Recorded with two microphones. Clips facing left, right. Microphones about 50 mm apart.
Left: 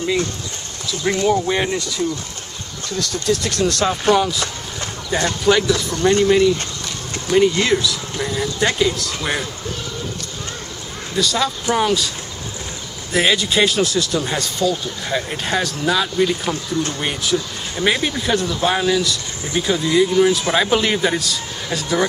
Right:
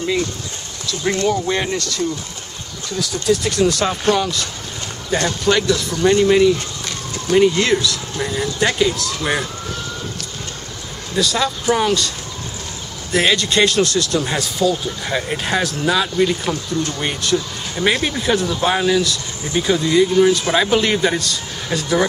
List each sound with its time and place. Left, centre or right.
0.8 s speech: centre
2.9 s speech: centre
11.1 s speech: centre
13.1 s speech: centre